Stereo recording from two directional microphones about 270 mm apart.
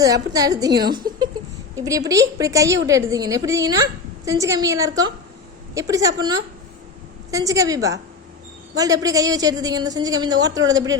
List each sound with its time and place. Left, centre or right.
0.0 s a woman's voice: centre
0.7 s a woman's voice: right
0.9 s a sound: centre
1.7 s a woman's voice: centre